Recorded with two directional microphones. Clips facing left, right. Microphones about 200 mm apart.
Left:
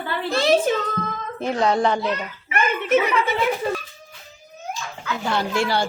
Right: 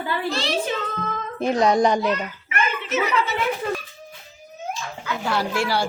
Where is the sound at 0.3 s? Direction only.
50° left (ahead or behind).